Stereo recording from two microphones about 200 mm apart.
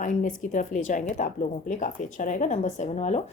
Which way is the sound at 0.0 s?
40° left (ahead or behind).